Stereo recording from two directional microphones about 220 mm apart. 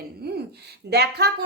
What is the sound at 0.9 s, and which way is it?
Speech, 45° right (ahead or behind).